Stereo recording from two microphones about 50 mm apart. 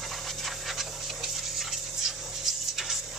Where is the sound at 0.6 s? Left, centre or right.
Centre.